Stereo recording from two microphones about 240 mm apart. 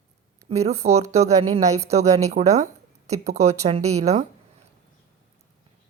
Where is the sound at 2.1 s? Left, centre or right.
Centre.